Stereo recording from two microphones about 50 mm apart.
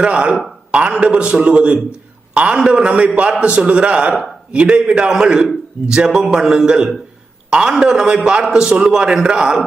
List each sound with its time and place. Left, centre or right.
0.0 s a man's voice: right